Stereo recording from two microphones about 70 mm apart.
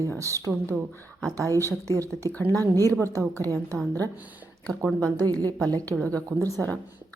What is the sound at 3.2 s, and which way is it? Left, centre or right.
Speech, right.